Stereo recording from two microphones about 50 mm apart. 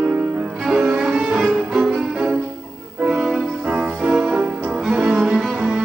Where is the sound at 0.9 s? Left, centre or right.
Centre.